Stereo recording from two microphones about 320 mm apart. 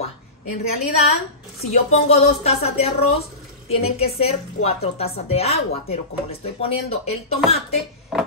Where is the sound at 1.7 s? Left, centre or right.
Centre.